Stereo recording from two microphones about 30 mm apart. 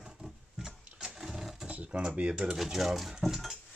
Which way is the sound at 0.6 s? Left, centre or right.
Right.